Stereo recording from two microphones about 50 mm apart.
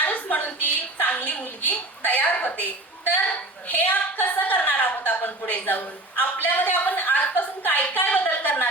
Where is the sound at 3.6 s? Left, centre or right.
Left.